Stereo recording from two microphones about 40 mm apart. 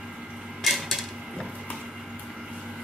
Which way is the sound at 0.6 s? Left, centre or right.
Centre.